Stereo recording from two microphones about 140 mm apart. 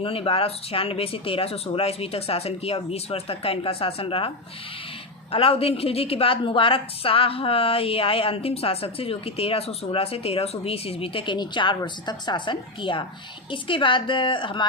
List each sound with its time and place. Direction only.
0.0 s a woman's voice: 40° left (ahead or behind)
5.3 s a woman's voice: 45° left (ahead or behind)